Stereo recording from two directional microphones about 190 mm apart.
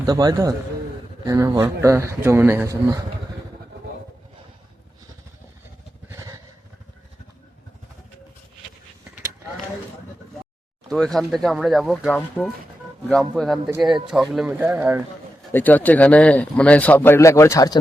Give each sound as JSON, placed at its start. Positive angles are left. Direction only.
{"t": 0.0, "sound": "a man's voice", "side_deg": -20}
{"t": 6.1, "sound": "vehicle", "side_deg": -15}
{"t": 10.8, "sound": "speech", "side_deg": 0}
{"t": 15.5, "sound": "speech", "side_deg": 10}